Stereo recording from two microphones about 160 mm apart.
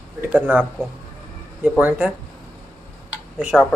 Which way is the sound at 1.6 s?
5° right (ahead or behind).